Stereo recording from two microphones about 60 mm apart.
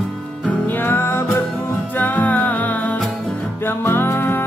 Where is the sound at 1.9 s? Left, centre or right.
Left.